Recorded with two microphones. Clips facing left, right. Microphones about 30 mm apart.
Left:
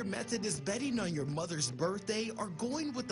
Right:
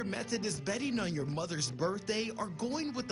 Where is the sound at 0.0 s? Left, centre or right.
Centre.